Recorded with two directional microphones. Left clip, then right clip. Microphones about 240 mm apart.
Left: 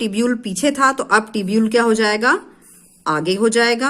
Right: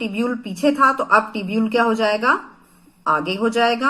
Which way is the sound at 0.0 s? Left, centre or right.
Left.